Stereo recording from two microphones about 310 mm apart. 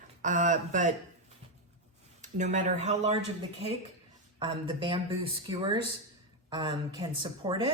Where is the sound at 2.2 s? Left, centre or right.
Right.